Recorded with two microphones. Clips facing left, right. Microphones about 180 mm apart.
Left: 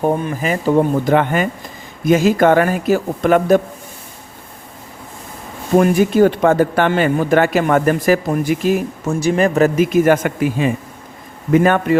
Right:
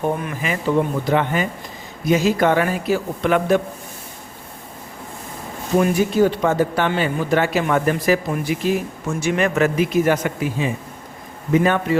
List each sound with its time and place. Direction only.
0.0 s speech: 30° left (ahead or behind)
5.7 s speech: 55° left (ahead or behind)
9.0 s speech: 35° left (ahead or behind); by 11.9 s 55° left (ahead or behind)